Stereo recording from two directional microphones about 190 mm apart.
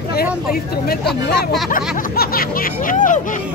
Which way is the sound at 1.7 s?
50° left (ahead or behind).